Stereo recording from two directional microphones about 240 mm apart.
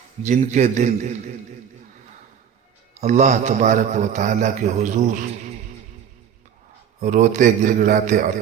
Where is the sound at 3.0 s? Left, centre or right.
Right.